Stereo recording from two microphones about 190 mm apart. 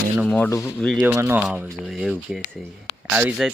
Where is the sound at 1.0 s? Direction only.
10° right (ahead or behind).